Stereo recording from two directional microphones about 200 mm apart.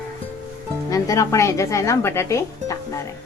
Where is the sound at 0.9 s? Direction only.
15° left (ahead or behind).